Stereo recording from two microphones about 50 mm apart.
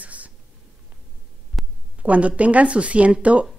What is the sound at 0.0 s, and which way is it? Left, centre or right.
Whispering, right.